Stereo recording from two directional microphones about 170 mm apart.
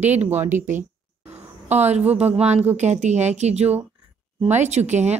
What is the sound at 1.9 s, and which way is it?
Speech, 40° right (ahead or behind).